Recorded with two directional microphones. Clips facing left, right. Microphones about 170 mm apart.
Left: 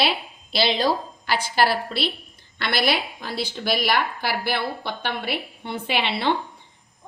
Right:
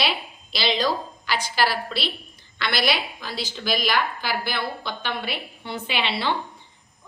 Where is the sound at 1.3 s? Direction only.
55° left (ahead or behind).